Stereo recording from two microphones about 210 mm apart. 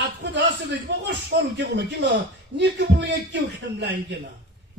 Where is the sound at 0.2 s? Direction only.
55° right (ahead or behind).